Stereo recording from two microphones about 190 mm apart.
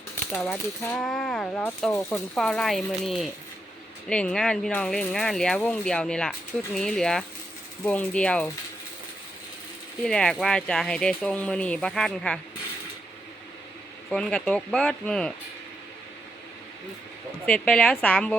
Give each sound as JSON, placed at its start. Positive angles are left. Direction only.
{"t": 0.3, "sound": "speech", "side_deg": 5}
{"t": 7.9, "sound": "ratchet", "side_deg": 5}
{"t": 10.0, "sound": "speech", "side_deg": 5}
{"t": 14.1, "sound": "speech", "side_deg": 5}
{"t": 17.4, "sound": "speech", "side_deg": 5}